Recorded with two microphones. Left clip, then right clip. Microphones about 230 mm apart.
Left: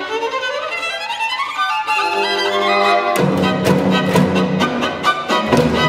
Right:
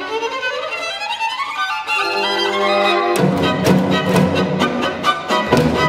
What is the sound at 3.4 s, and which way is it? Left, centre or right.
Music, left.